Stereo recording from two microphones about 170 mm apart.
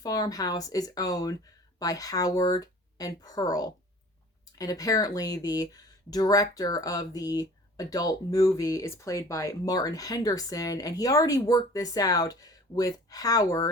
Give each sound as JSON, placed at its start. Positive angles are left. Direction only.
{"t": 0.0, "sound": "speech", "side_deg": 20}